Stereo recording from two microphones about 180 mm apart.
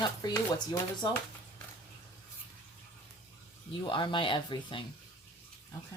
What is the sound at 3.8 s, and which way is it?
Speech, 25° left (ahead or behind).